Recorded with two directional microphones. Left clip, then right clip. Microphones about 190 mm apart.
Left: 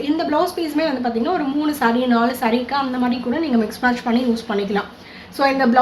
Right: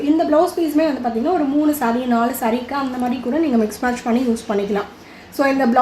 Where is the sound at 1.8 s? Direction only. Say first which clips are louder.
Left 1 dB; 50° right (ahead or behind).